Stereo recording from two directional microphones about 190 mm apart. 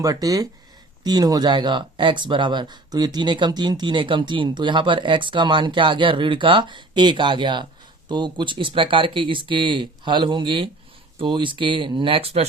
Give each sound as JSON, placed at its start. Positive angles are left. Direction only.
{"t": 0.0, "sound": "speech", "side_deg": -20}